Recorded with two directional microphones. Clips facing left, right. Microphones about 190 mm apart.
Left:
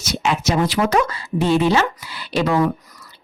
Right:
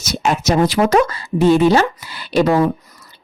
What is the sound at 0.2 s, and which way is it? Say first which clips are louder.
Speech: right 4 dB; 45° right (ahead or behind).